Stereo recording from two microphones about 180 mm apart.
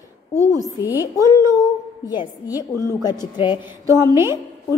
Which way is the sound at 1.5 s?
25° left (ahead or behind).